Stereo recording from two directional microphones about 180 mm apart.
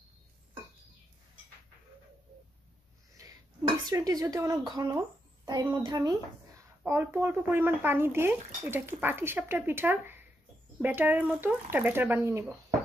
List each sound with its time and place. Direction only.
3.8 s a woman's voice: 20° right (ahead or behind)